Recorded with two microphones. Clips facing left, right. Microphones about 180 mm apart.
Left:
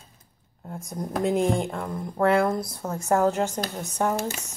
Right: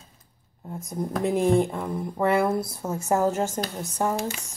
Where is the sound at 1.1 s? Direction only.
Centre (ahead or behind).